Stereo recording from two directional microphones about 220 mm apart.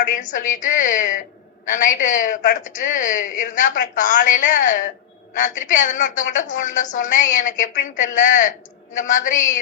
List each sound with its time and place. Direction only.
0.0 s speech: 35° left (ahead or behind)